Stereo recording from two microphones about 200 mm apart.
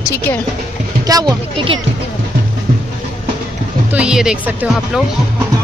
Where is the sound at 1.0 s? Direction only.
20° right (ahead or behind).